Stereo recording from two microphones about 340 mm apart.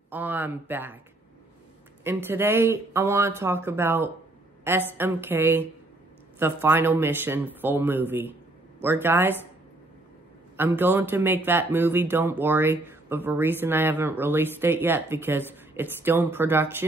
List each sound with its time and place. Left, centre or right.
0.1 s speech: centre
2.0 s speech: centre
10.6 s speech: centre